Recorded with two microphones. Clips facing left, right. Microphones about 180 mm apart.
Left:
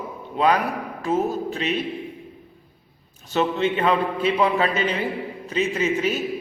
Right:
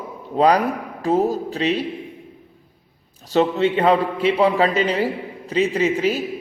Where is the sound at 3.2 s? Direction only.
35° right (ahead or behind).